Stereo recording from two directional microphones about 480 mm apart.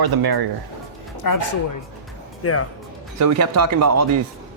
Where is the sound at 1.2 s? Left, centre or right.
Left.